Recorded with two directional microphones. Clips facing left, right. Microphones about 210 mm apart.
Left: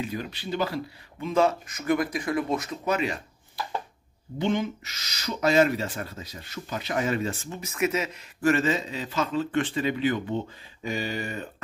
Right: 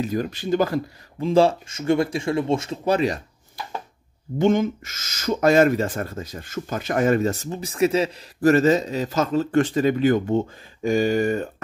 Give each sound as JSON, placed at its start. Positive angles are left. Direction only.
{"t": 0.0, "sound": "speech", "side_deg": -45}
{"t": 1.2, "sound": "speech", "side_deg": -30}
{"t": 4.4, "sound": "speech", "side_deg": -45}